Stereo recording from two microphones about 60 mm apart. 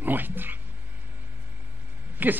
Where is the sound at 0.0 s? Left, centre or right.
Right.